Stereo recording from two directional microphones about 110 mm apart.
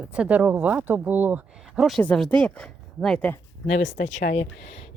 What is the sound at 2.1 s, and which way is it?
Speech, 5° left (ahead or behind).